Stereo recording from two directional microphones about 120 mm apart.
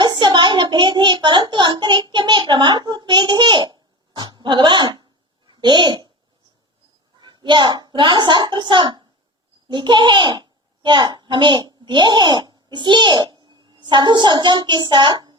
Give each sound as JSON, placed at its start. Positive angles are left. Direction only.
{"t": 0.0, "sound": "a woman's voice", "side_deg": -40}
{"t": 7.2, "sound": "a woman's voice", "side_deg": -40}